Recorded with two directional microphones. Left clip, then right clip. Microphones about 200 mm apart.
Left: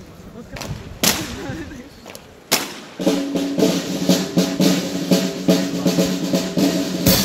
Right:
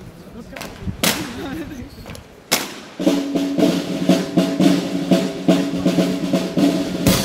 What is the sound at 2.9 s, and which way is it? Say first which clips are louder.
Music: right 1 dB; 30° left (ahead or behind).